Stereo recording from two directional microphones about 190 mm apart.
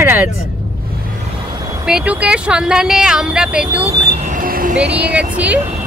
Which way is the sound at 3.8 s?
35° right (ahead or behind).